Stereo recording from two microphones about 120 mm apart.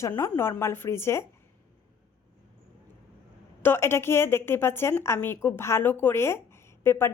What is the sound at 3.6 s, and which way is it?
A woman's voice, 20° left (ahead or behind).